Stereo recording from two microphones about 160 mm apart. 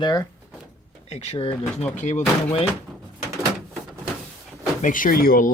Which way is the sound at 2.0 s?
50° left (ahead or behind).